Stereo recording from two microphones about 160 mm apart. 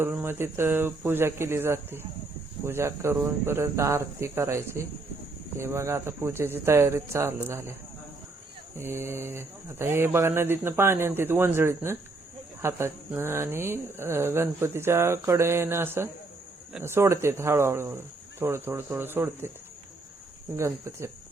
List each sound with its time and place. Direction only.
0.0 s speech: 15° right (ahead or behind)
20.6 s speech: 15° right (ahead or behind)